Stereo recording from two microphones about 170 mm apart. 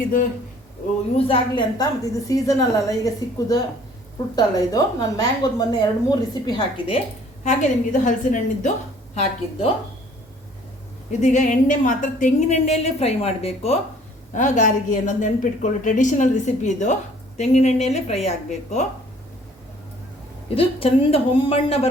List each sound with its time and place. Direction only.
1.1 s a woman's voice: 30° left (ahead or behind)
7.4 s a woman's voice: 45° left (ahead or behind)
9.1 s a woman's voice: 35° left (ahead or behind)
11.2 s a woman's voice: 45° left (ahead or behind)
20.6 s a woman's voice: 35° left (ahead or behind)